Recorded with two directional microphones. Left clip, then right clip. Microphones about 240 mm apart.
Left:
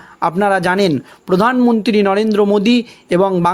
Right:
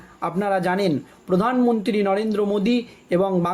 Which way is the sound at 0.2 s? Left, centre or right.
Left.